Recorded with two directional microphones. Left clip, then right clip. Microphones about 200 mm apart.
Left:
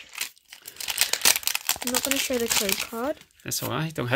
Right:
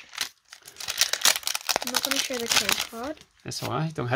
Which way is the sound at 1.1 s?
10° right (ahead or behind).